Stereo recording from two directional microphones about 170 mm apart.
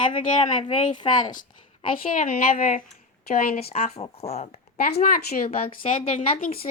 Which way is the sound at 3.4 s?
55° left (ahead or behind).